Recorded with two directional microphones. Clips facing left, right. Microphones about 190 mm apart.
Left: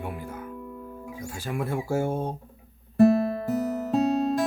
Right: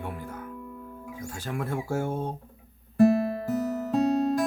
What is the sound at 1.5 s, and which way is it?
Speech, 10° left (ahead or behind).